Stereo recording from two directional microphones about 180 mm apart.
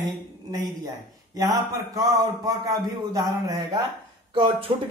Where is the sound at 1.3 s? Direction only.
20° right (ahead or behind).